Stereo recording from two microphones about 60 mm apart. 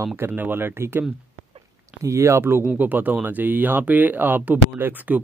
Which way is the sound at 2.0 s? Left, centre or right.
Right.